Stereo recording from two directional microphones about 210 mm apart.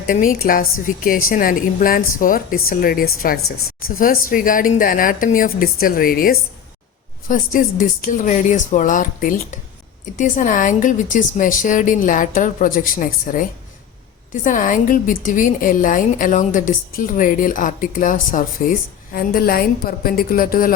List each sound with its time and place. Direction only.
0.1 s a woman's voice: 40° left (ahead or behind)
14.4 s a woman's voice: 40° left (ahead or behind)